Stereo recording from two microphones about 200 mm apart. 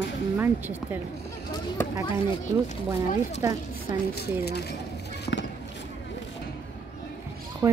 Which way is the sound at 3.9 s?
55° left (ahead or behind).